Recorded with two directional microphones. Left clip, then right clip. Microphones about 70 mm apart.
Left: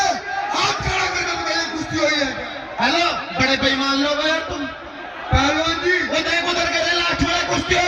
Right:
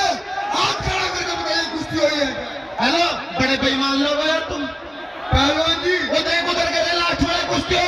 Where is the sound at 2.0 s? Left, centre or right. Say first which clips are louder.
Even; centre.